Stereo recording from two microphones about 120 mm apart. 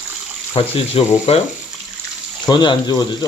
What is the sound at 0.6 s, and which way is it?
Speech, 50° left (ahead or behind).